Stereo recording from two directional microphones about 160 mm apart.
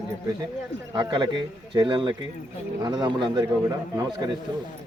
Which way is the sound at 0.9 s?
25° right (ahead or behind).